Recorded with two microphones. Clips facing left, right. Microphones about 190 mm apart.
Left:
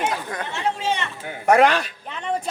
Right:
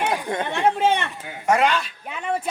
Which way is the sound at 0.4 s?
55° right (ahead or behind).